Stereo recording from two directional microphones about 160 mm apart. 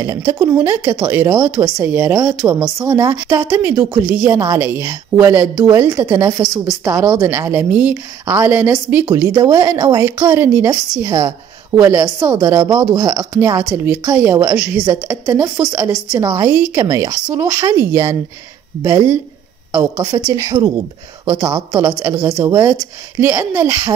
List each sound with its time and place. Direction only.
0.0 s a woman's voice: 20° right (ahead or behind)
11.8 s a woman's voice: 15° right (ahead or behind)